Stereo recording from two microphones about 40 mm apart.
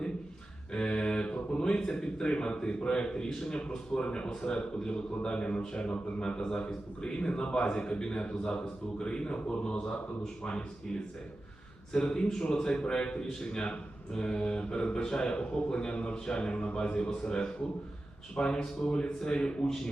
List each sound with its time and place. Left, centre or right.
0.7 s mantra: left
1.9 s a man's voice: left
11.9 s a man's voice: left